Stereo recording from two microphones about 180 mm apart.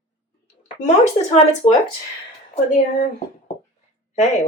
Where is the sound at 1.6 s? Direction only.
30° left (ahead or behind).